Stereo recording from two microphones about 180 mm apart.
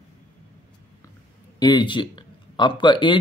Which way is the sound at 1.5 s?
25° left (ahead or behind).